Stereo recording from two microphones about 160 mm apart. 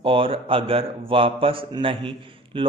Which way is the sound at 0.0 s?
35° right (ahead or behind).